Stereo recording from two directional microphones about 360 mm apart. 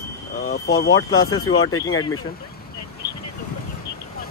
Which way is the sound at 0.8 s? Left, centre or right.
Left.